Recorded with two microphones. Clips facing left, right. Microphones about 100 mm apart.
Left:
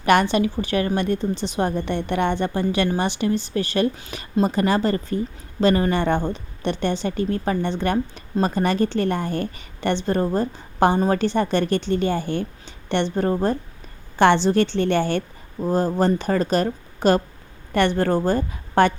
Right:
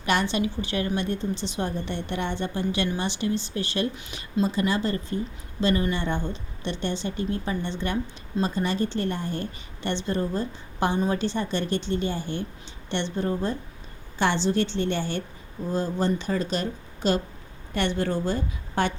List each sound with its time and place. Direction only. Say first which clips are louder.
0.0 s a woman's voice: left 7 dB; 55° left (ahead or behind)